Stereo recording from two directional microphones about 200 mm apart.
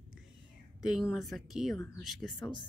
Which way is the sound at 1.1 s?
Centre (ahead or behind).